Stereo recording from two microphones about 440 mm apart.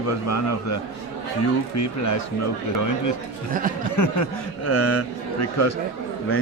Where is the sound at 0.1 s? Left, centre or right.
Left.